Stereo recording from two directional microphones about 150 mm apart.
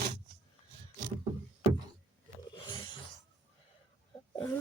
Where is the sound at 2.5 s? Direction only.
30° left (ahead or behind).